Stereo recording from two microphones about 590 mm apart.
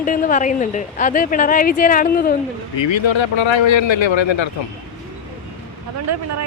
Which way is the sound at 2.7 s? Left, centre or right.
Left.